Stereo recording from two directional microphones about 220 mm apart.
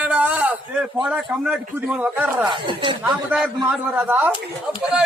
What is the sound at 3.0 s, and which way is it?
A man's voice, 5° right (ahead or behind).